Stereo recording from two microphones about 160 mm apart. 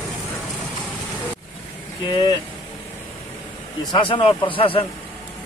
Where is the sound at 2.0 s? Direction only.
30° left (ahead or behind).